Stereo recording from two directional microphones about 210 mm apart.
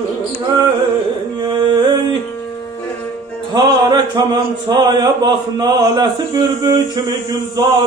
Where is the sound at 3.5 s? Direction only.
20° right (ahead or behind).